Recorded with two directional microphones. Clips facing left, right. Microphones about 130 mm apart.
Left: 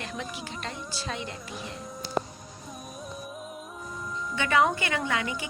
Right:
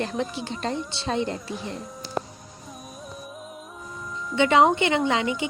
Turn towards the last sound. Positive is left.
turn(degrees=-25)  # may be behind; listen again after turning